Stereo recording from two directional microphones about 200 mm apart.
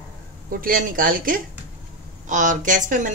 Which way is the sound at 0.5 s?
45° right (ahead or behind).